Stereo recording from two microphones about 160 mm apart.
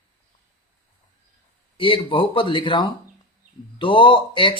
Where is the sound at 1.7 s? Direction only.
30° left (ahead or behind).